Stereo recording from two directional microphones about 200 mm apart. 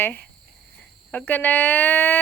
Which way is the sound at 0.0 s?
10° left (ahead or behind).